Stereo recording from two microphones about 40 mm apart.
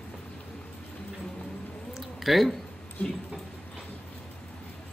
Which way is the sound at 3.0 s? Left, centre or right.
Left.